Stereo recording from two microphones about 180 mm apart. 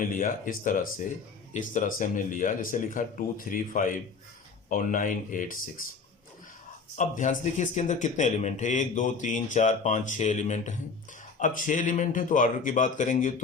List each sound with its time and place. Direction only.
0.0 s speech: 50° left (ahead or behind)
6.9 s speech: 45° left (ahead or behind)